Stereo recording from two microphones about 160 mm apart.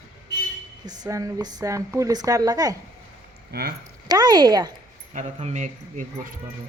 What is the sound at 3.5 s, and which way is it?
Speech, 75° right (ahead or behind).